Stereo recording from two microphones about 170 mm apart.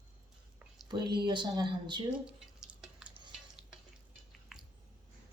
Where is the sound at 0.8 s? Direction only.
25° right (ahead or behind).